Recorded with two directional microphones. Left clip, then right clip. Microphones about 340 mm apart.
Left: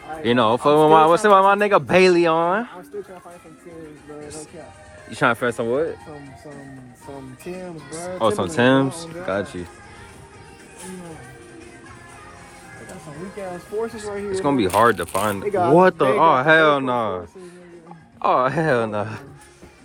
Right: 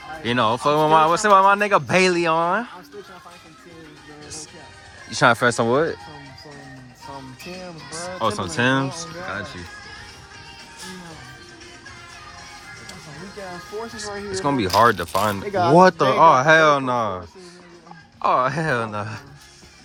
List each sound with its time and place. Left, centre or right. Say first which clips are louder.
0.1 s speech: left 2 dB; centre
5.0 s speech: right 3 dB; centre
7.9 s speech: left 3 dB; centre
13.8 s speech: left 3 dB; centre